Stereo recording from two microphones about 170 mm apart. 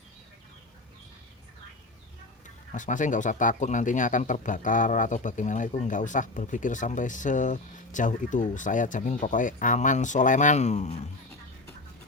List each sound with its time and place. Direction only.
2.7 s speech: 50° left (ahead or behind)